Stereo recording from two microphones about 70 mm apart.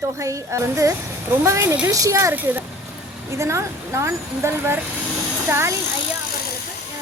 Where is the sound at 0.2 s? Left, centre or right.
Right.